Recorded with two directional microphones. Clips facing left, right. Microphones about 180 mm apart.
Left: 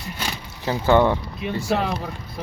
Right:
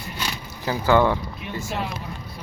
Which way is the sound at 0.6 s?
25° left (ahead or behind).